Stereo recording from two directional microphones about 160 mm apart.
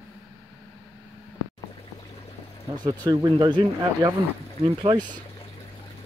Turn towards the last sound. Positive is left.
turn(degrees=-30)  # may be behind; listen again after turning